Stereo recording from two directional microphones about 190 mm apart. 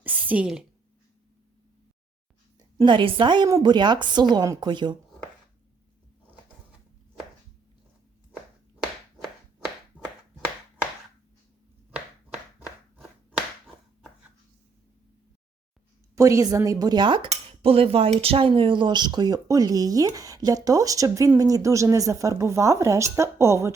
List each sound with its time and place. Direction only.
0.0 s a sound: 10° right (ahead or behind)
2.7 s cutlery: 25° right (ahead or behind)
9.1 s clapping: centre (ahead or behind)
11.9 s clapping: 5° right (ahead or behind)
16.1 s a woman's voice: 15° right (ahead or behind)
17.2 s cutlery: 30° right (ahead or behind)
23.1 s a woman's voice: 15° right (ahead or behind)